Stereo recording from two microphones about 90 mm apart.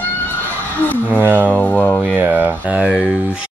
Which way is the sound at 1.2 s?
20° right (ahead or behind).